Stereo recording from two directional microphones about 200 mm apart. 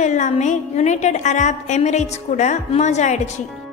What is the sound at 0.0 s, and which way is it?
A woman's voice, 35° left (ahead or behind).